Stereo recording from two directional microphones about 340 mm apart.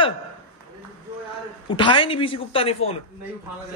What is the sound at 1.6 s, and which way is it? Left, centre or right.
Speech, centre.